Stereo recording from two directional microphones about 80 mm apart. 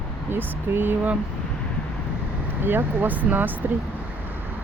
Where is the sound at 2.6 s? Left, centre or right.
Right.